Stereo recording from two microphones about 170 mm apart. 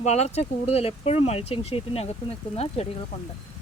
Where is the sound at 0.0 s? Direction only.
40° left (ahead or behind).